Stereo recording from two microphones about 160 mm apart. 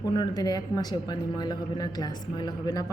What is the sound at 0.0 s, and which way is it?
Speech, 25° left (ahead or behind).